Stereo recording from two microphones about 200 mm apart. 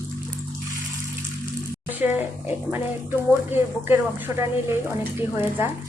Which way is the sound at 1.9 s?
10° right (ahead or behind).